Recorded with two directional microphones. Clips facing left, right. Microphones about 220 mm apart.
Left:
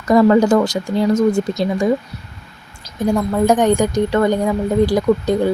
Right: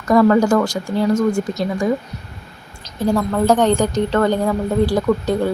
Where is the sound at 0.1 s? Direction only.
20° left (ahead or behind).